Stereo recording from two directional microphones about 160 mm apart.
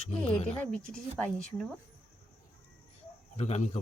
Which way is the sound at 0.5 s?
5° left (ahead or behind).